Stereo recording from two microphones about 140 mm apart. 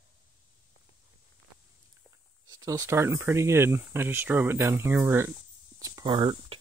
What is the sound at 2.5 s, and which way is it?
Speech, 25° right (ahead or behind).